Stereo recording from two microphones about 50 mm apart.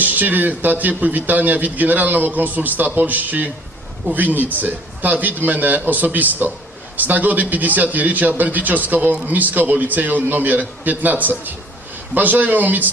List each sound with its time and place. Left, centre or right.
0.0 s a man's voice: right